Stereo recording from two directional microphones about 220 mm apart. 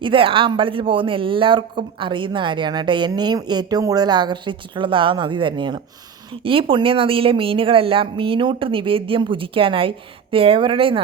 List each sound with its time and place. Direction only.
0.0 s speech: 25° right (ahead or behind)